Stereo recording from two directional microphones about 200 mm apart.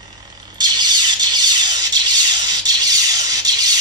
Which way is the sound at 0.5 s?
20° right (ahead or behind).